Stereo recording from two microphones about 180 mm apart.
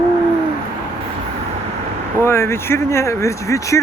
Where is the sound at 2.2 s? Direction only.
15° left (ahead or behind).